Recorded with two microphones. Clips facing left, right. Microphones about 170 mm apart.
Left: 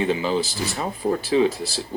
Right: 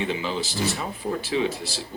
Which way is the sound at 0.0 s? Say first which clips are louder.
Left 5 dB; 40° left (ahead or behind).